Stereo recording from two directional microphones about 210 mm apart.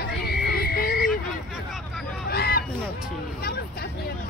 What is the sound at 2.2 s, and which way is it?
Honk, 45° left (ahead or behind).